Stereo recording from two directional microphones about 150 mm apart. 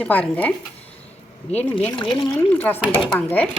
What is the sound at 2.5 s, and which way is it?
Speech, 10° left (ahead or behind).